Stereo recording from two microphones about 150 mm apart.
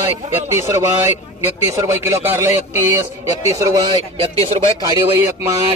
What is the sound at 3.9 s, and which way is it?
Speech, 40° right (ahead or behind).